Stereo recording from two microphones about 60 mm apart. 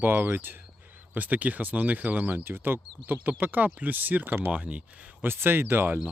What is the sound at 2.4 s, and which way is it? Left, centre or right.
Speech, right.